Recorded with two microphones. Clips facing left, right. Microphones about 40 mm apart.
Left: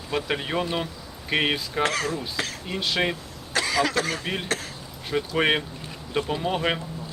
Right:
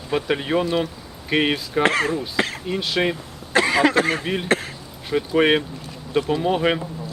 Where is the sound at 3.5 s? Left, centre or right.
Right.